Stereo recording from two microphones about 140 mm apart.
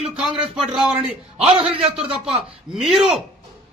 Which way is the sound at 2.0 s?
5° right (ahead or behind).